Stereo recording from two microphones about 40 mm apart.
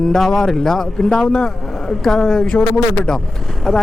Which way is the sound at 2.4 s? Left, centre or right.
Left.